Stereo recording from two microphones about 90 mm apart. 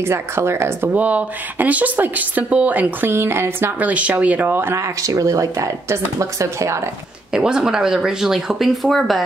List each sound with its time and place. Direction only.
0.0 s speech: 30° right (ahead or behind)
0.9 s speech: 15° right (ahead or behind)
3.8 s speech: 15° right (ahead or behind)
5.0 s speech: 40° right (ahead or behind)
7.3 s speech: 10° right (ahead or behind)